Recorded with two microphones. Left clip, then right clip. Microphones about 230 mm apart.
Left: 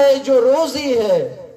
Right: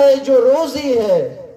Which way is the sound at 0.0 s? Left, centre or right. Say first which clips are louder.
Right 2 dB; left.